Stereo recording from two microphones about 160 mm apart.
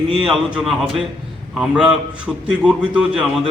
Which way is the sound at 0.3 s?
Centre (ahead or behind).